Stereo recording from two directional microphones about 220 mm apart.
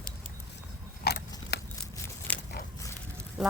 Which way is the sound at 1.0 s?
45° left (ahead or behind).